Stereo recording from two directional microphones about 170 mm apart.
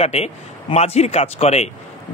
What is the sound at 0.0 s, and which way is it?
A man's voice, 35° left (ahead or behind).